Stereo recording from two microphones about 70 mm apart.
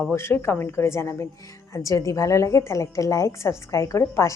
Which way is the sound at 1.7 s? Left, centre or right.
Left.